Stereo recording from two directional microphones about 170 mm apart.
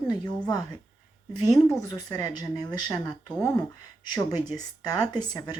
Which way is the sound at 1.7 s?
25° left (ahead or behind).